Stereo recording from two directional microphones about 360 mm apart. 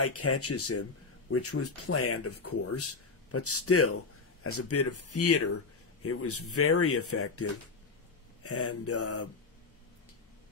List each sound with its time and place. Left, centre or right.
0.0 s speech: left